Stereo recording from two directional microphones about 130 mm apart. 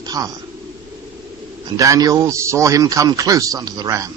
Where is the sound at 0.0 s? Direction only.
30° right (ahead or behind).